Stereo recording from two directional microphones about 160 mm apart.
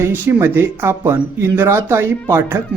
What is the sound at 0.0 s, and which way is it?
Speech, 15° right (ahead or behind).